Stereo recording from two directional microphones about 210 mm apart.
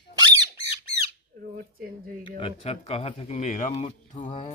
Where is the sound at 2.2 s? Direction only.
25° left (ahead or behind).